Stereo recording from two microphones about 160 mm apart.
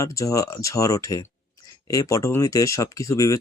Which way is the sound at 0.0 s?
20° left (ahead or behind).